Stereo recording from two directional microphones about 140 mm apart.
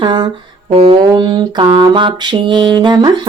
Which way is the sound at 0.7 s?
45° right (ahead or behind).